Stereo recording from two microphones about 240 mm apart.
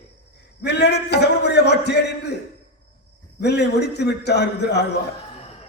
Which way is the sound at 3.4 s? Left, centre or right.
Left.